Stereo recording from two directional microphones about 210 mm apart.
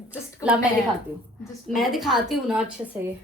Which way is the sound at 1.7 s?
Centre (ahead or behind).